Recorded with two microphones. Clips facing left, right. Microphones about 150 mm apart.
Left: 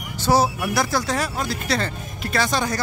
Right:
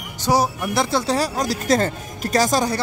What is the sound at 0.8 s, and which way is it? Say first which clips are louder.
Speech: right 3 dB; 25° right (ahead or behind).